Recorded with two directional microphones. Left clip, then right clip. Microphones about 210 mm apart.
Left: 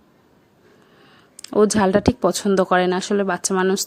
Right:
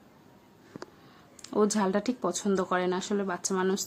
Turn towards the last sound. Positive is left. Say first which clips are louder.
# left 9 dB
turn(degrees=35)  # may be behind; listen again after turning